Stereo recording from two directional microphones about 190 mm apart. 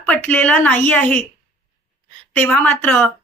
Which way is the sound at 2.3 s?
10° left (ahead or behind).